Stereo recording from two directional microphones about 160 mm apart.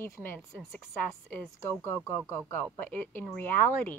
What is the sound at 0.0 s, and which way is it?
Speech, 15° left (ahead or behind).